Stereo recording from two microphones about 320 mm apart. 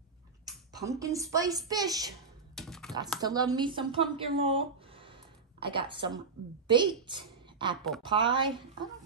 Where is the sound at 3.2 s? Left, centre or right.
Centre.